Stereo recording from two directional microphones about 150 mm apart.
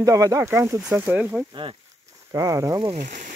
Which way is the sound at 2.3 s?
20° right (ahead or behind).